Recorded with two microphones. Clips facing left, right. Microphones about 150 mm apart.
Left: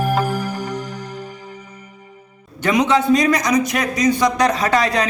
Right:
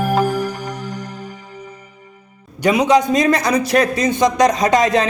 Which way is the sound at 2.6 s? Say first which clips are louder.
Right 2 dB; 10° right (ahead or behind).